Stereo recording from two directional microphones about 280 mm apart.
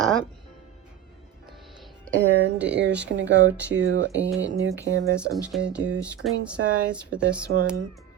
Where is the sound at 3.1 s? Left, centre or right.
Right.